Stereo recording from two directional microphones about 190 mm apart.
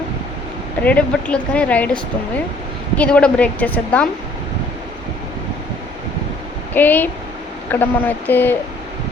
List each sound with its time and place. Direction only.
0.8 s speech: 5° left (ahead or behind)
3.0 s a woman's voice: 5° left (ahead or behind)
6.7 s speech: 10° left (ahead or behind)